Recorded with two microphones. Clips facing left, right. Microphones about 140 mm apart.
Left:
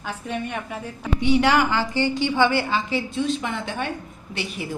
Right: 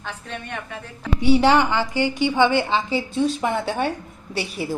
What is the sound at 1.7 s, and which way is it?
A woman's voice, 15° right (ahead or behind).